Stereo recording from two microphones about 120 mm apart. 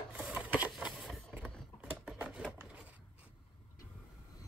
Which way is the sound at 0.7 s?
Centre (ahead or behind).